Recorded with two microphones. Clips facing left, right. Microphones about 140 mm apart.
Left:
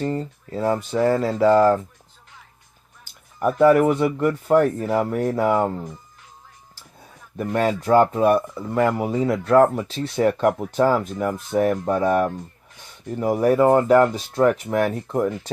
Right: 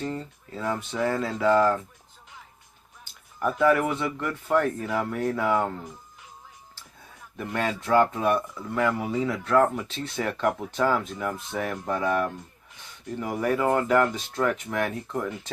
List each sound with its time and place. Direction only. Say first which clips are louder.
0.0 s speech: left 7 dB; 40° left (ahead or behind)
3.6 s speech: left 7 dB; 40° left (ahead or behind)
7.3 s speech: left 7 dB; 40° left (ahead or behind)